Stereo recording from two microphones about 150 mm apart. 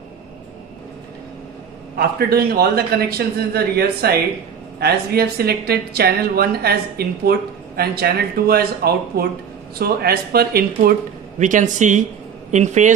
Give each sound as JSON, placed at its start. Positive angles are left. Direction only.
{"t": 2.0, "sound": "speech", "side_deg": -90}
{"t": 10.8, "sound": "speech", "side_deg": -65}